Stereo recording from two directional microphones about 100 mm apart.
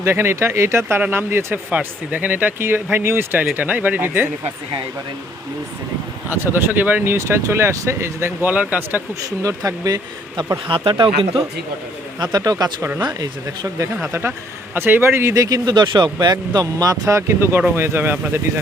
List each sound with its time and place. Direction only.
0.0 s speech: 25° right (ahead or behind)
6.3 s speech: 20° right (ahead or behind)
9.4 s speech: 35° right (ahead or behind)
10.7 s speech: 60° right (ahead or behind)
12.2 s speech: 40° right (ahead or behind)
14.1 s speech: 25° right (ahead or behind)